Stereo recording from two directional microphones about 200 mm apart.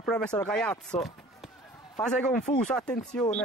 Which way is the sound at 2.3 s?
35° left (ahead or behind).